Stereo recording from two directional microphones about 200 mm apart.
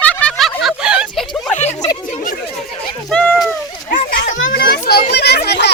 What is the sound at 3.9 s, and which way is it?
Children playing, 40° left (ahead or behind).